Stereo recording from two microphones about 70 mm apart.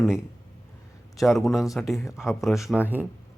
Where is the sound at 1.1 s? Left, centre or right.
Centre.